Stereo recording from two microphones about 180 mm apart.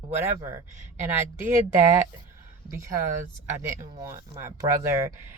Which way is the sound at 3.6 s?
20° right (ahead or behind).